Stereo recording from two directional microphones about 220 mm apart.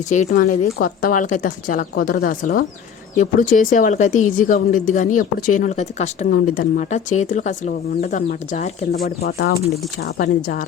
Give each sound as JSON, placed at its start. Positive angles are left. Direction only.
{"t": 0.1, "sound": "a woman's voice", "side_deg": 35}